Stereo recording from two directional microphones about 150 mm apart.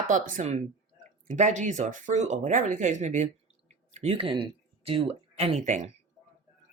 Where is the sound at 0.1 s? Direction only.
60° right (ahead or behind).